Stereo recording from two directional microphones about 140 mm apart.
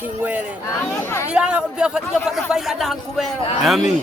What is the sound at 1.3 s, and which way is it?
A man's voice, 5° right (ahead or behind).